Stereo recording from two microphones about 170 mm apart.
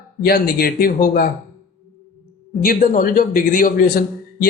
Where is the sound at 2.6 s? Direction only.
55° left (ahead or behind).